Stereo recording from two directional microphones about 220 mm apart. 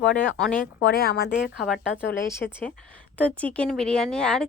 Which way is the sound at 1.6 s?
Centre (ahead or behind).